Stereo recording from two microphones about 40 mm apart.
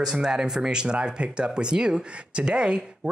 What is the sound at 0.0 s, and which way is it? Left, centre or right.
A man's voice, centre.